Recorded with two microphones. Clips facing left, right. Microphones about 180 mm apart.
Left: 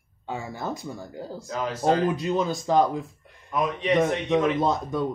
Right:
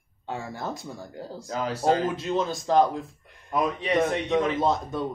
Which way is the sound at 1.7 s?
30° right (ahead or behind).